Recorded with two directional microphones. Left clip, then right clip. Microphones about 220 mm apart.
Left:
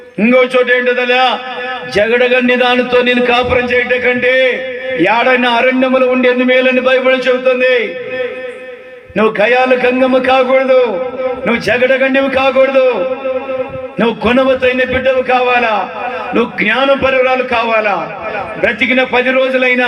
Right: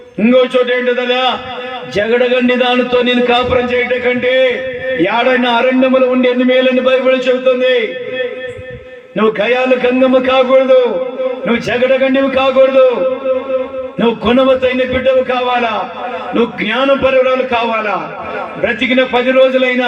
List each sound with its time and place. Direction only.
0.3 s a man's voice: 20° left (ahead or behind)
9.1 s a man's voice: 25° left (ahead or behind)
14.0 s a man's voice: 25° left (ahead or behind)